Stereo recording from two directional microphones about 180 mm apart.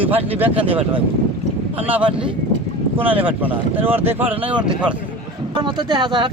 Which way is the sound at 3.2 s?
10° right (ahead or behind).